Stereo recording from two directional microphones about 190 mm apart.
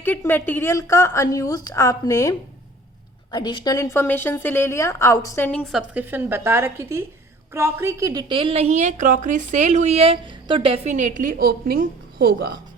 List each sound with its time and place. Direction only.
0.0 s a woman's voice: 10° left (ahead or behind)
3.3 s a woman's voice: 20° left (ahead or behind)
5.5 s a woman's voice: 5° left (ahead or behind); by 12.5 s 55° right (ahead or behind)